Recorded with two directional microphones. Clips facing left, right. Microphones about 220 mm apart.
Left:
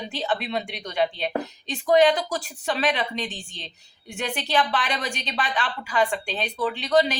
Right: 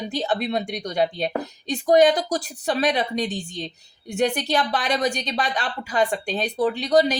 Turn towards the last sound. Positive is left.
turn(degrees=-40)  # may be behind; listen again after turning